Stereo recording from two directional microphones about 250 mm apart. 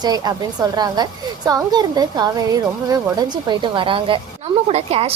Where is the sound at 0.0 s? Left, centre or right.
Centre.